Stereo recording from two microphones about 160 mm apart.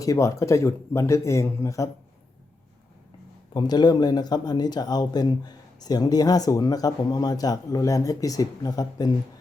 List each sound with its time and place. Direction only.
0.0 s speech: 20° left (ahead or behind)
3.5 s speech: 25° left (ahead or behind)